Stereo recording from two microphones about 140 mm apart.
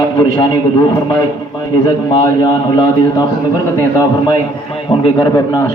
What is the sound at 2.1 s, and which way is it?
A man's voice, 30° left (ahead or behind).